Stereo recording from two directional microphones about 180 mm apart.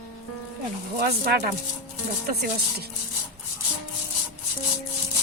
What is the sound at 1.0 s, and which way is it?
Speech, 60° right (ahead or behind).